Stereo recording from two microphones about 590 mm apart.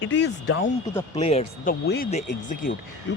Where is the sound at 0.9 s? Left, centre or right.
Centre.